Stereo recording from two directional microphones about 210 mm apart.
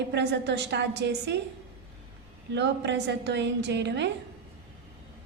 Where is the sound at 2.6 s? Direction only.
55° right (ahead or behind).